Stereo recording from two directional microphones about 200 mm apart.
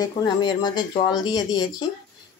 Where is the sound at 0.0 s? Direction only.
20° left (ahead or behind).